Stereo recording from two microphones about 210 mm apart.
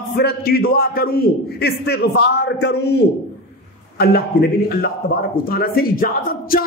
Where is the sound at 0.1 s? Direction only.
45° left (ahead or behind).